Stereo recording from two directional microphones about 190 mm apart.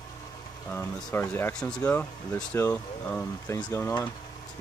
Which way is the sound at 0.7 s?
10° left (ahead or behind).